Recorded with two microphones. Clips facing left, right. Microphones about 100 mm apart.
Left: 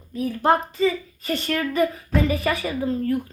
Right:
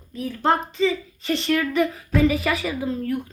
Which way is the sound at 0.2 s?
10° left (ahead or behind).